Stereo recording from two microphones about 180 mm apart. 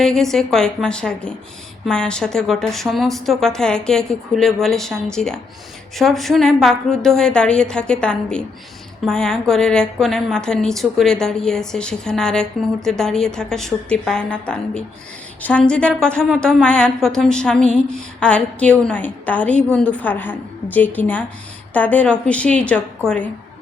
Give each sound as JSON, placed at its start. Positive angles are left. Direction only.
{"t": 0.0, "sound": "a woman's voice", "side_deg": 0}